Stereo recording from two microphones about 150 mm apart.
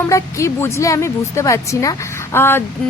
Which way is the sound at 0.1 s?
20° left (ahead or behind).